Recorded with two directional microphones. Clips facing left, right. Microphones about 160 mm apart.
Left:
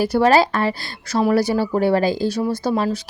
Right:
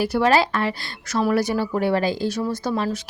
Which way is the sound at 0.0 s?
40° left (ahead or behind).